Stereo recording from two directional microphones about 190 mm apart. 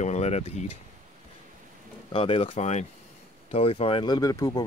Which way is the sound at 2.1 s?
30° left (ahead or behind).